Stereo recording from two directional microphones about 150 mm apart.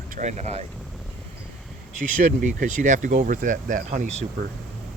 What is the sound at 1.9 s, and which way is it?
Speech, 60° right (ahead or behind).